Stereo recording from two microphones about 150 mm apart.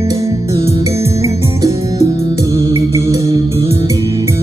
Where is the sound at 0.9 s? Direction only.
45° left (ahead or behind).